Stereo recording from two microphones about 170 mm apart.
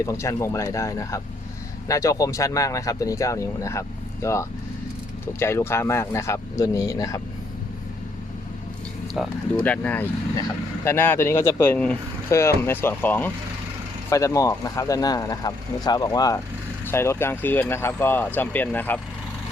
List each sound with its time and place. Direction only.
0.0 s speech: 15° left (ahead or behind)
9.1 s speech: 5° left (ahead or behind)